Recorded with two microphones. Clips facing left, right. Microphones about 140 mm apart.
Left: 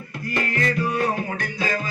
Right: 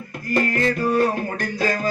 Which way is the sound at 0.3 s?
40° right (ahead or behind).